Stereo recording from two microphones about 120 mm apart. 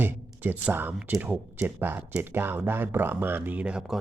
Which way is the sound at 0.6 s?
15° right (ahead or behind).